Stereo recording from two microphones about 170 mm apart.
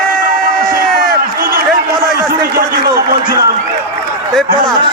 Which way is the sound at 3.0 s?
60° right (ahead or behind).